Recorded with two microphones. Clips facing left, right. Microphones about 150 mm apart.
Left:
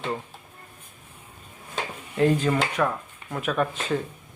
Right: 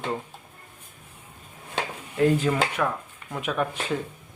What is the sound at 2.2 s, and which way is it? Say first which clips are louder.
Speech: even; 10° right (ahead or behind).